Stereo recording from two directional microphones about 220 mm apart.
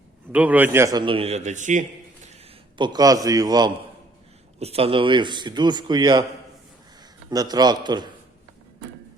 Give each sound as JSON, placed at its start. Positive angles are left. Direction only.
{"t": 0.3, "sound": "a man's voice", "side_deg": -5}
{"t": 2.7, "sound": "a man's voice", "side_deg": -20}
{"t": 7.3, "sound": "a man's voice", "side_deg": -20}